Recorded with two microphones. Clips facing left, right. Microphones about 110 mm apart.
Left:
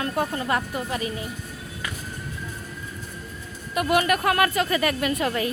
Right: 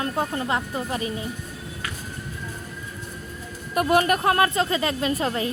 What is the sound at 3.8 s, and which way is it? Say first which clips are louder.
A woman's voice: right 2 dB; 40° right (ahead or behind).